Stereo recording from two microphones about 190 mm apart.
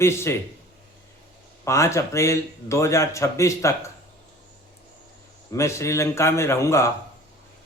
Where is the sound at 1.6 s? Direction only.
15° left (ahead or behind).